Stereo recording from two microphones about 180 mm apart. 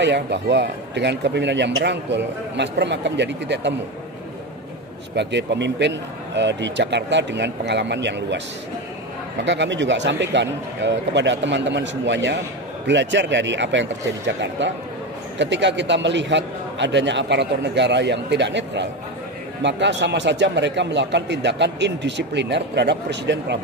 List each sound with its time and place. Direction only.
0.0 s a man's voice: 75° right (ahead or behind)
5.1 s a man's voice: 75° right (ahead or behind)
9.4 s a man's voice: 85° right